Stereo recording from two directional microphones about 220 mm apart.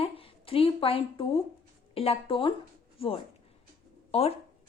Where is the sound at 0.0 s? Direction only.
25° left (ahead or behind).